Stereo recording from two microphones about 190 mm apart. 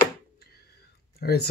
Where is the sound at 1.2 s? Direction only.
55° left (ahead or behind).